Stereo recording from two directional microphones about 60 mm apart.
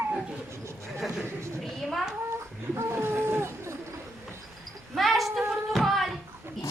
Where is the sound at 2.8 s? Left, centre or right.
Right.